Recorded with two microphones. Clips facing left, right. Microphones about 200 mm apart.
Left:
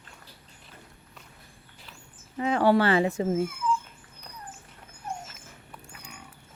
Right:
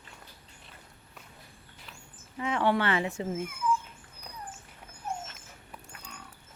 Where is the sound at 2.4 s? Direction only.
35° left (ahead or behind).